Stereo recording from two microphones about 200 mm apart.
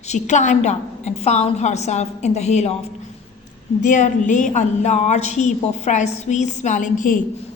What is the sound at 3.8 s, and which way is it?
A woman's voice, 40° left (ahead or behind).